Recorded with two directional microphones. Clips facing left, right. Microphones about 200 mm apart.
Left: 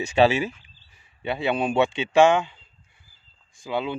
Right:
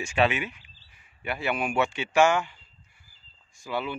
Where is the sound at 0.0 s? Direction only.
35° left (ahead or behind).